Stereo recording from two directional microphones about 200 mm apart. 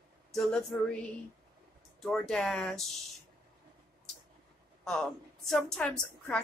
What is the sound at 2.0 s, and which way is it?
Speech, 5° left (ahead or behind).